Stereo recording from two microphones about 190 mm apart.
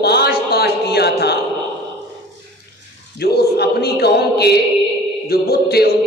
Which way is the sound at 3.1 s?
55° left (ahead or behind).